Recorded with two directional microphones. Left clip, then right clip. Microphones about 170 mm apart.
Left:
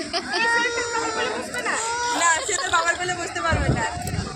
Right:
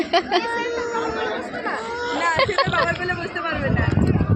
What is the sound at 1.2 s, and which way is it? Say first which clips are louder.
Speech: even; 15° left (ahead or behind).